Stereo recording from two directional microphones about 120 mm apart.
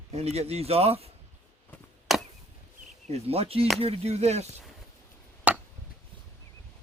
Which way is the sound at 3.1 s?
55° right (ahead or behind).